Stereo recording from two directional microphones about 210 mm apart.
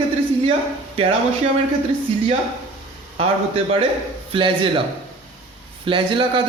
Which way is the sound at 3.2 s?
25° right (ahead or behind).